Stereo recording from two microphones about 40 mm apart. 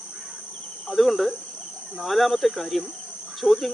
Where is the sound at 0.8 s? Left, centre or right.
Centre.